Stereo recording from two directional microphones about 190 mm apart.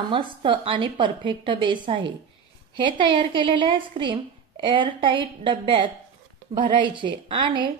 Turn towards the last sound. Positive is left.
turn(degrees=-25)  # may be behind; listen again after turning